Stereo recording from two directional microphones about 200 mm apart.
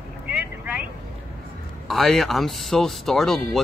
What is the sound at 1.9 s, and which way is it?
Speech, centre (ahead or behind).